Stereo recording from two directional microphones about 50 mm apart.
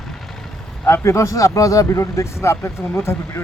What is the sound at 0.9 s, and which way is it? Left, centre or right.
Speech, left.